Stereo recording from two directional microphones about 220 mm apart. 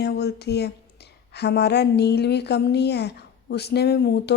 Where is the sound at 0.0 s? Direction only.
50° left (ahead or behind).